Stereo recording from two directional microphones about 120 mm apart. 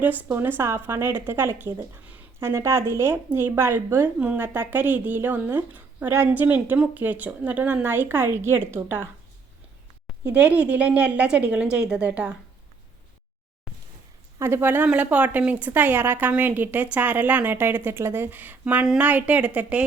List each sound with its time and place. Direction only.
0.0 s speech: 15° right (ahead or behind)
10.2 s speech: 10° right (ahead or behind)
14.3 s speech: 20° right (ahead or behind)